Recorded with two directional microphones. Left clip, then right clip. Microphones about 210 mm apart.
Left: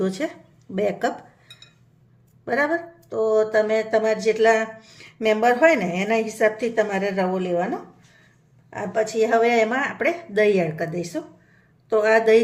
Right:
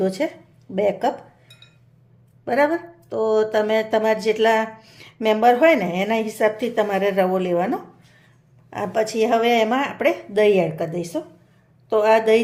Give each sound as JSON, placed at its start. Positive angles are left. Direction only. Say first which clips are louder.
{"t": 0.0, "sound": "speech", "louder": "right 3 dB", "side_deg": -5}
{"t": 2.4, "sound": "speech", "louder": "right 3 dB", "side_deg": -15}